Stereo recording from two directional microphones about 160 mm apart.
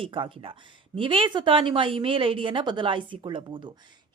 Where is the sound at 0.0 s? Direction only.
35° right (ahead or behind).